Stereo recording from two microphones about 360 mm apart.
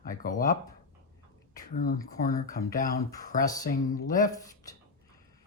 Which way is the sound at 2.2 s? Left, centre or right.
Left.